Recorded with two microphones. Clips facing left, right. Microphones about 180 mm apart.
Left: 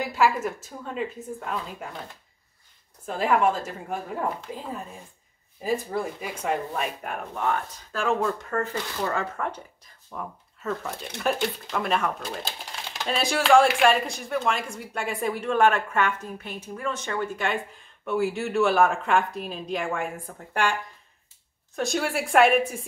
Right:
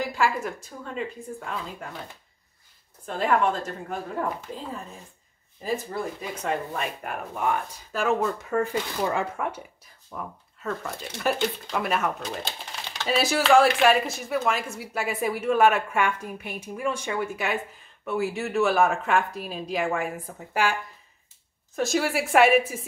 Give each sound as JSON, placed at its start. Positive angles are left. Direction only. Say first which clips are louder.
{"t": 0.0, "sound": "speech", "louder": "left 2 dB", "side_deg": 0}
{"t": 3.1, "sound": "a woman's voice", "louder": "left 1 dB", "side_deg": 5}
{"t": 6.2, "sound": "speech", "louder": "left 1 dB", "side_deg": 5}
{"t": 10.1, "sound": "speech", "louder": "even", "side_deg": 0}
{"t": 21.7, "sound": "speech", "louder": "right 2 dB", "side_deg": 0}